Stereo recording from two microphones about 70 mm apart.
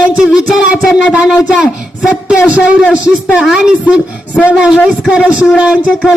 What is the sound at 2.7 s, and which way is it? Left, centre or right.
Speech, centre.